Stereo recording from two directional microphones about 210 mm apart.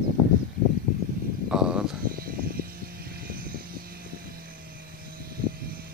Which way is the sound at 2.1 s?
45° right (ahead or behind).